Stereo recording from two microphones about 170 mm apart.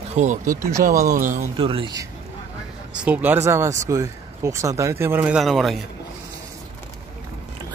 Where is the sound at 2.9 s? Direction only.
5° right (ahead or behind).